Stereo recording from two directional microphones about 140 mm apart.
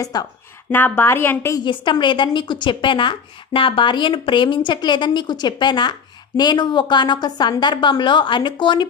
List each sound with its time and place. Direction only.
0.0 s speech: 25° left (ahead or behind)
0.7 s a woman's voice: 15° left (ahead or behind)
1.6 s speech: 35° left (ahead or behind)